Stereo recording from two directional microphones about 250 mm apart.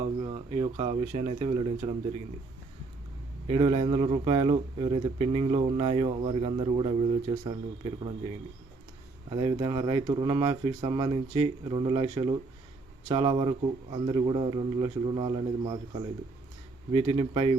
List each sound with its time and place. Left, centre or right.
0.2 s speech: centre
3.4 s speech: right
9.3 s speech: centre
16.9 s speech: right